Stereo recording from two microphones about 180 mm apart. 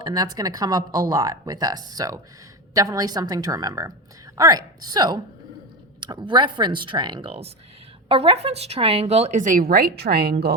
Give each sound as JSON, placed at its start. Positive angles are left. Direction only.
{"t": 0.0, "sound": "speech", "side_deg": -20}